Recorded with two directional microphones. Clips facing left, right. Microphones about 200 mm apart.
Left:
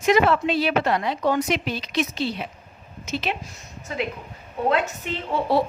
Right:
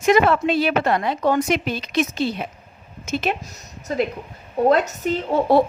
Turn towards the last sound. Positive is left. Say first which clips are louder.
# right 5 dB
turn(degrees=-40)  # may be behind; listen again after turning